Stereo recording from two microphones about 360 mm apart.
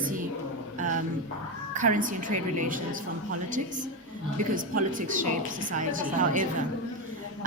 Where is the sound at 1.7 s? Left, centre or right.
Right.